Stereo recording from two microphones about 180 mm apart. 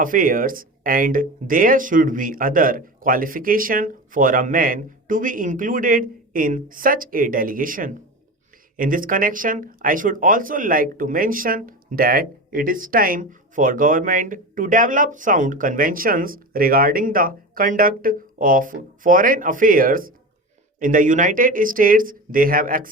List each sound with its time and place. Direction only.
0.0 s speech: 50° right (ahead or behind)